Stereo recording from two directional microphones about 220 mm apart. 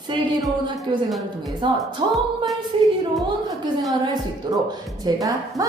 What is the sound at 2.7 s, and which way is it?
Speech, 25° right (ahead or behind).